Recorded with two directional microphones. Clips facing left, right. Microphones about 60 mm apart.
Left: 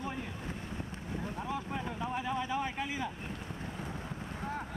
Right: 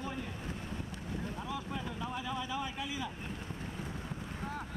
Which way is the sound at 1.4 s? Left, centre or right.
Left.